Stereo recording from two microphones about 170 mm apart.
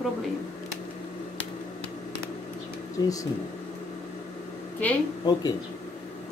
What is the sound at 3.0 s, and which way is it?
Speech, 20° left (ahead or behind).